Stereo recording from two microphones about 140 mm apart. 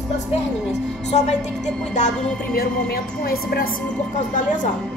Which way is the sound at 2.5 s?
90° left.